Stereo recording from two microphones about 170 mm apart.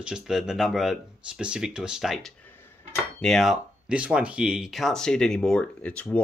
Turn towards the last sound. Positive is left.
turn(degrees=5)  # may be behind; listen again after turning